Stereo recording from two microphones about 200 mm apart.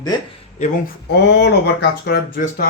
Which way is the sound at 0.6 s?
50° left (ahead or behind).